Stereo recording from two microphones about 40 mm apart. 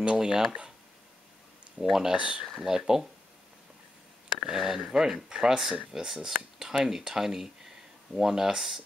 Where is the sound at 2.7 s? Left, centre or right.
Centre.